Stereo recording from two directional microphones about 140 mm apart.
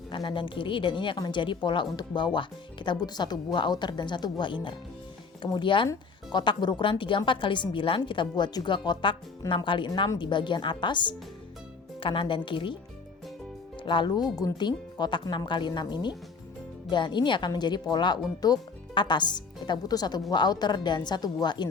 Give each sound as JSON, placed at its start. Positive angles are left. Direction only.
{"t": 0.1, "sound": "a woman's voice", "side_deg": 35}
{"t": 13.8, "sound": "a woman's voice", "side_deg": 35}